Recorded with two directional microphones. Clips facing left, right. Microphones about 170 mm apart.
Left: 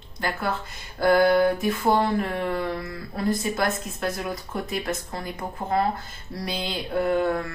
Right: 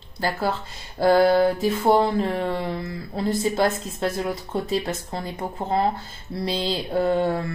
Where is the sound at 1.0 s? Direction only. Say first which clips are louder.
Right 2 dB; 25° right (ahead or behind).